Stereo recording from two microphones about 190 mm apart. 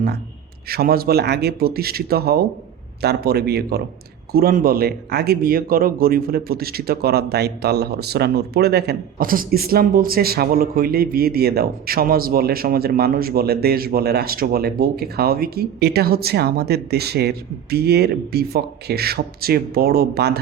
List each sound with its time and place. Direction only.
0.7 s speech: 55° right (ahead or behind)